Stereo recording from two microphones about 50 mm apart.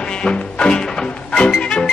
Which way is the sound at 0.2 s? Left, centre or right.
Centre.